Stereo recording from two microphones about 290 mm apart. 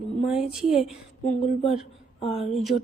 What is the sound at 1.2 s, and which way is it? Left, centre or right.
A woman's voice, left.